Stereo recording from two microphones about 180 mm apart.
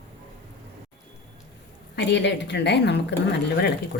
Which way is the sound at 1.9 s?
70° left (ahead or behind).